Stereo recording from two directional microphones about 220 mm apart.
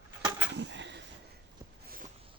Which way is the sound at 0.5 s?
55° right (ahead or behind).